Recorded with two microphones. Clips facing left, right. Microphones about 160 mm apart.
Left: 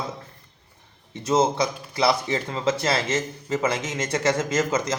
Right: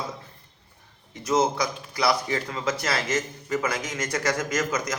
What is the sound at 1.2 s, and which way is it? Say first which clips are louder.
Speech: left 2 dB; 25° left (ahead or behind).